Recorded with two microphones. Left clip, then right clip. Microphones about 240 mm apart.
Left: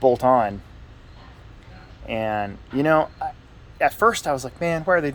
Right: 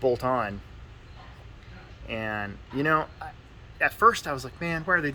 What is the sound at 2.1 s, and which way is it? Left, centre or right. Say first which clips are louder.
Speech: left 7 dB; left.